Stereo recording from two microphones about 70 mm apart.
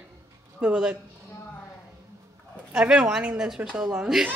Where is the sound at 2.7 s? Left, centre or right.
Centre.